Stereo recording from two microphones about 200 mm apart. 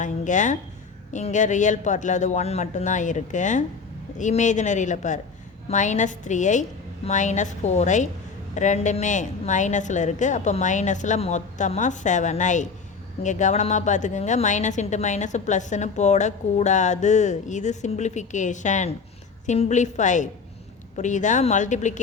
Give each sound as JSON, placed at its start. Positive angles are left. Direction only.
{"t": 0.0, "sound": "a woman's voice", "side_deg": 40}